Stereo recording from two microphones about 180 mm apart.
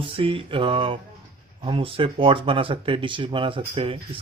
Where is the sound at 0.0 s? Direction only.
30° right (ahead or behind).